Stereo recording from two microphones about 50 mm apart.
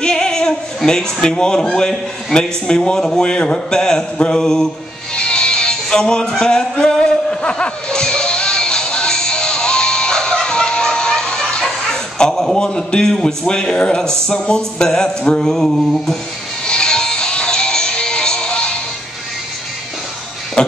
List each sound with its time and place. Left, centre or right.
0.0 s singing: centre
0.8 s a man's voice: centre
5.1 s music: centre
13.7 s a man's voice: centre
16.6 s music: centre
20.6 s music: centre